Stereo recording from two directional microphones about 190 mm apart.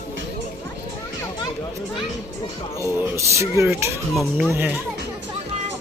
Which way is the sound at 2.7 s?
15° left (ahead or behind).